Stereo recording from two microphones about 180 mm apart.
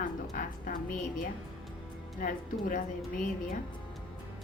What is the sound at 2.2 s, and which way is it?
Speech, 50° left (ahead or behind).